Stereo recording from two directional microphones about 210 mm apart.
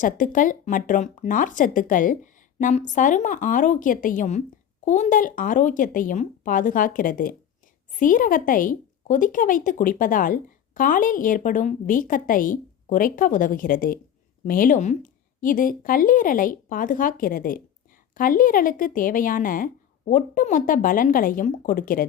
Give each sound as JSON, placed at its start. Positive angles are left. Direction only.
{"t": 0.0, "sound": "speech", "side_deg": 40}